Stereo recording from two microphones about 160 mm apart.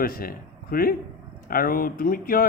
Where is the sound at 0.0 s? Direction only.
65° left (ahead or behind).